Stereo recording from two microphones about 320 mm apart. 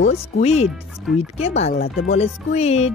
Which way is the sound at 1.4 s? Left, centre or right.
Centre.